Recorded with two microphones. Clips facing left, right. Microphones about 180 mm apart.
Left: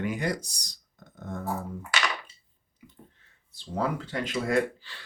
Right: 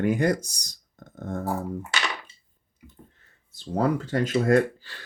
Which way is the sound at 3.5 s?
40° right (ahead or behind).